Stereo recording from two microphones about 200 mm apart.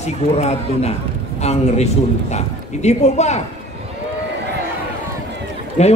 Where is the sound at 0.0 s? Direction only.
35° left (ahead or behind).